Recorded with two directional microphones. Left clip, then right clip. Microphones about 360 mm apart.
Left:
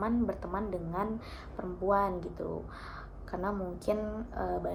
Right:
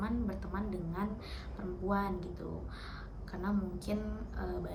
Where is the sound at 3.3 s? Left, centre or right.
Centre.